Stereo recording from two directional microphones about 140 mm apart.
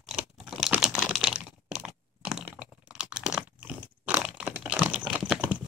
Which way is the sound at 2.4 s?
5° right (ahead or behind).